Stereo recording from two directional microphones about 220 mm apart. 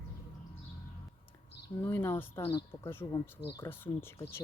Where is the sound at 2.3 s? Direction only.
20° left (ahead or behind).